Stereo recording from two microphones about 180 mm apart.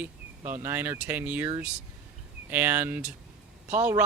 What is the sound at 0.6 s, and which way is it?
Speech, 10° right (ahead or behind).